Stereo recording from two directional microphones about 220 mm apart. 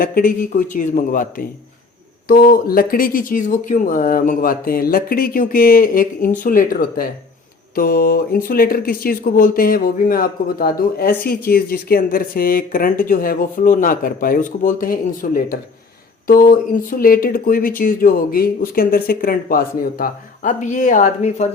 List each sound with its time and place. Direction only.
0.0 s speech: 40° left (ahead or behind)